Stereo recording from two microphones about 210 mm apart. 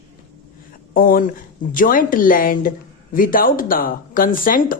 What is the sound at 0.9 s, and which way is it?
Speech, 40° left (ahead or behind).